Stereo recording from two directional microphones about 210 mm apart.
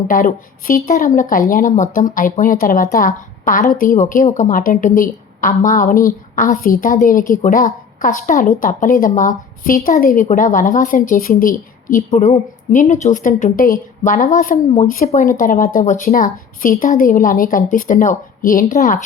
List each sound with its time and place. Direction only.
0.1 s a woman's voice: 40° left (ahead or behind)